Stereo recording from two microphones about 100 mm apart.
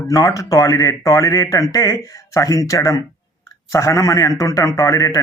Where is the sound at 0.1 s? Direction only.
40° left (ahead or behind).